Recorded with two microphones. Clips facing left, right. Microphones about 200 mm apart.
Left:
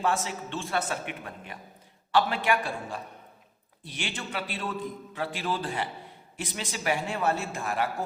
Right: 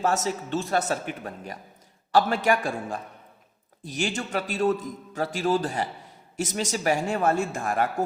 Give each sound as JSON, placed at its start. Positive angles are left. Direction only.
{"t": 0.0, "sound": "a man's voice", "side_deg": -40}